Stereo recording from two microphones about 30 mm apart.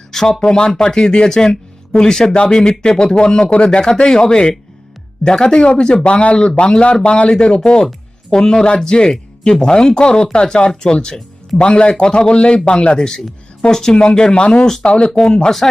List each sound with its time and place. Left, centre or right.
0.3 s a man's voice: left
13.9 s a man's voice: left